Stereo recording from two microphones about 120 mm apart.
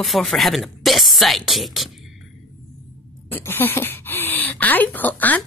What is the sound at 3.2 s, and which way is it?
Speech, 20° left (ahead or behind).